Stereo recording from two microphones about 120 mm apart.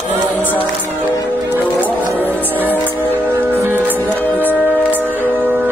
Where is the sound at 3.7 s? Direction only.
15° right (ahead or behind).